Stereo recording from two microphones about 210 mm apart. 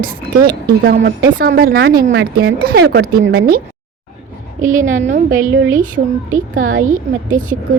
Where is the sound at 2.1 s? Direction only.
60° right (ahead or behind).